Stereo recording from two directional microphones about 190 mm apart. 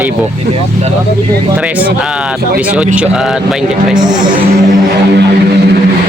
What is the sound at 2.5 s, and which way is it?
Speech, 5° right (ahead or behind).